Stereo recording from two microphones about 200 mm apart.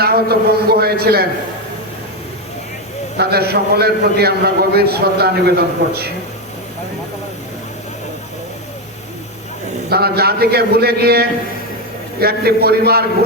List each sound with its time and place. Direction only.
0.0 s a man's voice: 50° right (ahead or behind)
3.2 s a man's voice: 50° right (ahead or behind)
9.9 s a man's voice: 50° right (ahead or behind)